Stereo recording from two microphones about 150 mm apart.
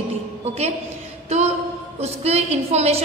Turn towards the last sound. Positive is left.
turn(degrees=-45)  # may be behind; listen again after turning